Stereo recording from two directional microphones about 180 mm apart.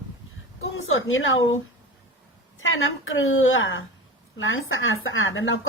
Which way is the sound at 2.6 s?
90° left.